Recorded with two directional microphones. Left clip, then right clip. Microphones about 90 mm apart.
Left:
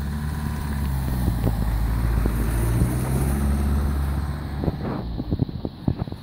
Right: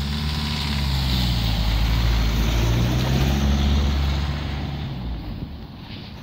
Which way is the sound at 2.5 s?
35° right (ahead or behind).